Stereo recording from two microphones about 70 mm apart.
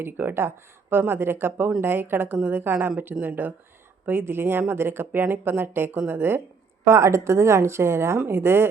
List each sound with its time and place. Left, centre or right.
0.0 s a woman's voice: right
6.8 s speech: right